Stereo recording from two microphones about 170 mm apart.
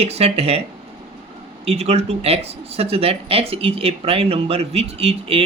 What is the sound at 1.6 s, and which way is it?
Speech, 35° right (ahead or behind).